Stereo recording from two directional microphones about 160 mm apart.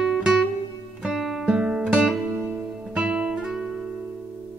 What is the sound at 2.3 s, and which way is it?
Music, 5° right (ahead or behind).